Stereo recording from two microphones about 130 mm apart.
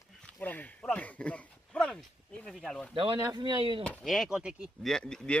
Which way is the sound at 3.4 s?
35° right (ahead or behind).